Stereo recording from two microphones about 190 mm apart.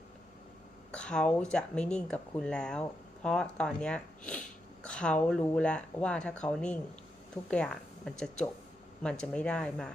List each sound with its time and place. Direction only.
0.9 s a woman's voice: 5° left (ahead or behind)